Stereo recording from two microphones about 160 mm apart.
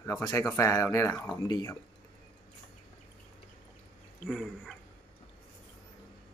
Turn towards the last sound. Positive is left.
turn(degrees=0)  # may be behind; listen again after turning